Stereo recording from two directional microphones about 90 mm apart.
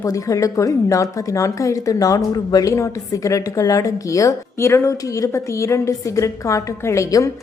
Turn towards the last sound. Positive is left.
turn(degrees=40)  # may be behind; listen again after turning